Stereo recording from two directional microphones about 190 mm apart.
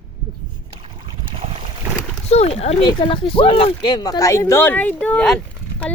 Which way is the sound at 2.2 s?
35° left (ahead or behind).